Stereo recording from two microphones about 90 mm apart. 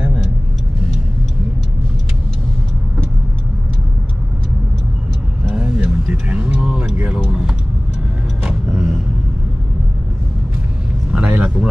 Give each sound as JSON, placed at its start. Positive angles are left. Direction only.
{"t": 5.5, "sound": "a sound", "side_deg": -15}
{"t": 8.5, "sound": "vehicle", "side_deg": -10}
{"t": 11.2, "sound": "vehicle", "side_deg": -20}